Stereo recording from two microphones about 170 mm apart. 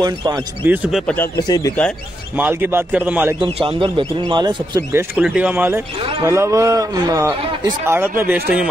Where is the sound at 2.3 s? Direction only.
10° right (ahead or behind).